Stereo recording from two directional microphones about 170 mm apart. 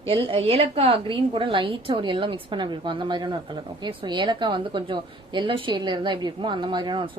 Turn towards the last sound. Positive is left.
turn(degrees=-30)  # may be behind; listen again after turning